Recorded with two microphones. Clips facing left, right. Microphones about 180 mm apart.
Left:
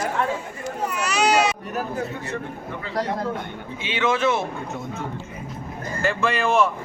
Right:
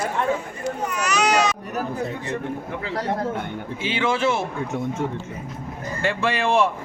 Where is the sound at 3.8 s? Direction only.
30° right (ahead or behind).